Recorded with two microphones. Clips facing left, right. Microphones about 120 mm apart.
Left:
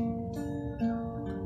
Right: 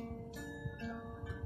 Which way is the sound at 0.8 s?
35° left (ahead or behind).